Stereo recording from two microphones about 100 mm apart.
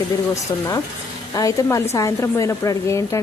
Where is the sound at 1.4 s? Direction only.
35° left (ahead or behind).